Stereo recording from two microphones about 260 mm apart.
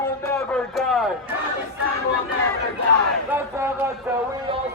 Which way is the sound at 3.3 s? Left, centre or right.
Centre.